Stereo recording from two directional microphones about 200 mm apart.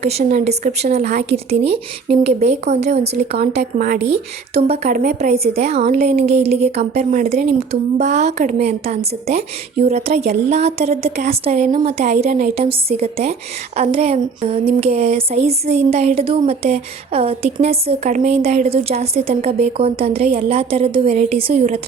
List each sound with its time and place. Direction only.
0.0 s a woman's voice: 30° right (ahead or behind)